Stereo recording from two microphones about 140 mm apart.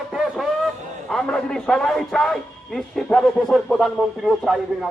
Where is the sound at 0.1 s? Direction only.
Centre (ahead or behind).